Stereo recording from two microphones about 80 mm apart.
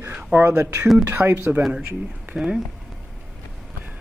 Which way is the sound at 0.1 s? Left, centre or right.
Centre.